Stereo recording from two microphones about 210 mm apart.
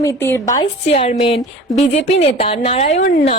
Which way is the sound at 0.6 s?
30° left (ahead or behind).